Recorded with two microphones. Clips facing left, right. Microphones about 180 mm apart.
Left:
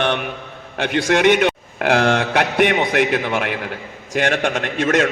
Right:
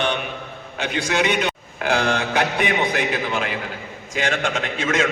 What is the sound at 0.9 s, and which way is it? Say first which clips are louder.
A man's voice: left 7 dB; 65° left (ahead or behind).